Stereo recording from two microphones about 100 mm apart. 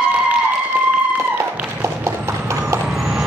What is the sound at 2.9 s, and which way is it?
Vehicle, 5° right (ahead or behind).